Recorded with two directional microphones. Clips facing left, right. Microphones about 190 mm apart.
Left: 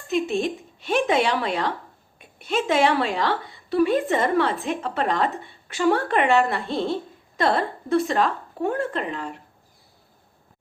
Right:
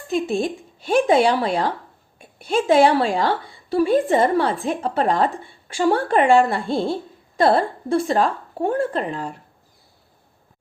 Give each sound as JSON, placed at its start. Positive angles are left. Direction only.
{"t": 0.1, "sound": "speech", "side_deg": -35}